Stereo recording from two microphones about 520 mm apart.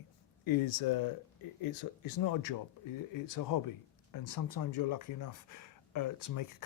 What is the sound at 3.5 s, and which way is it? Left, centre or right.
Speech, left.